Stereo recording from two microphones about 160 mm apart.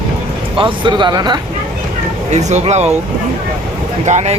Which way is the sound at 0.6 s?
30° right (ahead or behind).